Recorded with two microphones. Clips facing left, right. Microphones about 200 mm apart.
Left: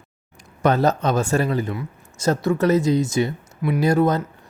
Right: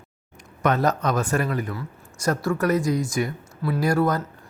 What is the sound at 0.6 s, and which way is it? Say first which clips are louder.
A man's voice: left 3 dB; 30° left (ahead or behind).